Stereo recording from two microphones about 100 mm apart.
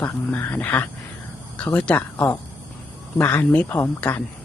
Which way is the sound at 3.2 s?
15° left (ahead or behind).